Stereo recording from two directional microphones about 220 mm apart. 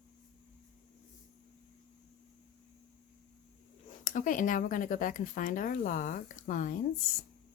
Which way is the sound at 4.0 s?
35° left (ahead or behind).